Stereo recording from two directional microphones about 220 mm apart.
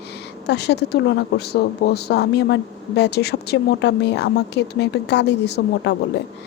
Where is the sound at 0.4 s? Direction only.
50° left (ahead or behind).